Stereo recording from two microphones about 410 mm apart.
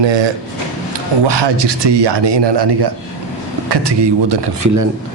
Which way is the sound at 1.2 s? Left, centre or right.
Right.